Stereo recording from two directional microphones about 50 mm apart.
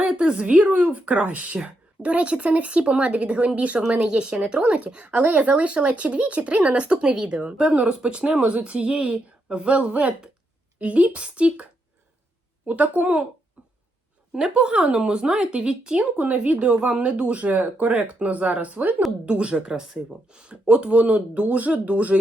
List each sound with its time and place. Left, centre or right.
0.1 s speech: centre
3.8 s speech: centre
14.3 s speech: centre